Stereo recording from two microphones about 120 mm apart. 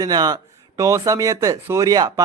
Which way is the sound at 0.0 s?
35° right (ahead or behind).